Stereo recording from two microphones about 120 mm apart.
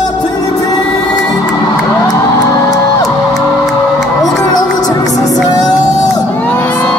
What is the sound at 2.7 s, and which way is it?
Music, 30° left (ahead or behind).